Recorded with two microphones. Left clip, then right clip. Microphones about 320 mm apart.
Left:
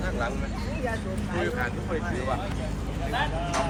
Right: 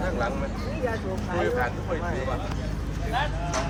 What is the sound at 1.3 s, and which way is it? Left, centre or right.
Speech, centre.